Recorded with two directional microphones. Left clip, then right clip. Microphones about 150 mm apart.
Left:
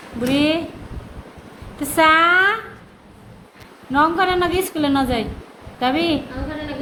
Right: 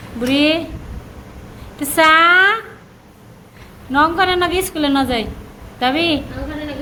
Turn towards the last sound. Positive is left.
turn(degrees=5)  # may be behind; listen again after turning